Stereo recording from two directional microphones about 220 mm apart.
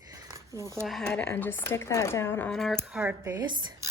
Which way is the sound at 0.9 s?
Centre (ahead or behind).